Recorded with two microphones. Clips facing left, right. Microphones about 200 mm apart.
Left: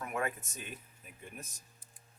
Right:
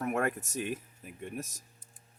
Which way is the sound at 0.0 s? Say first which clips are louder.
Right 6 dB; 45° right (ahead or behind).